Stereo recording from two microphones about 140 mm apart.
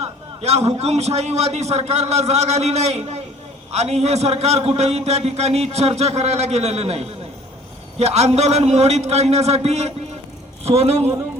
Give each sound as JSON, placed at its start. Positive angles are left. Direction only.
{"t": 0.0, "sound": "a man's voice", "side_deg": -50}